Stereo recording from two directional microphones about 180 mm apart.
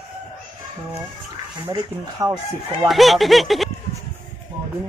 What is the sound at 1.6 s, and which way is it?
Speech, 20° right (ahead or behind).